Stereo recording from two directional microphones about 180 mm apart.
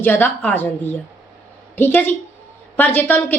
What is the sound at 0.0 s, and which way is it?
Speech, 10° left (ahead or behind).